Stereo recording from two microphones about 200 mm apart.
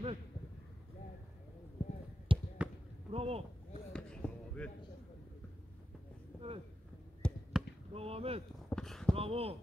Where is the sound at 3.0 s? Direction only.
30° right (ahead or behind).